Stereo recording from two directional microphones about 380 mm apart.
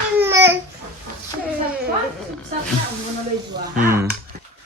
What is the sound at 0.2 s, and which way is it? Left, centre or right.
Babbling, centre.